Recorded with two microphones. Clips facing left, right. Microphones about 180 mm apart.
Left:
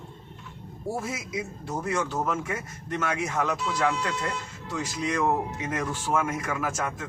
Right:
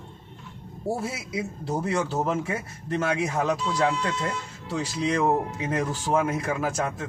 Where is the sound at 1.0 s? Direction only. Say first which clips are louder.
Right 2 dB; 30° right (ahead or behind).